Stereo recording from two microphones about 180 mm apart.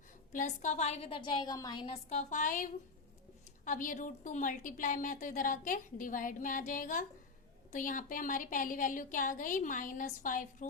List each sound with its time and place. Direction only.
0.3 s a woman's voice: 45° left (ahead or behind); by 1.9 s 25° left (ahead or behind)
2.0 s a woman's voice: 45° left (ahead or behind)